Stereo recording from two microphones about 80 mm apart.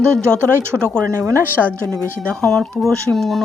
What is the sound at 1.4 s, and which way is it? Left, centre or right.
Speech, right.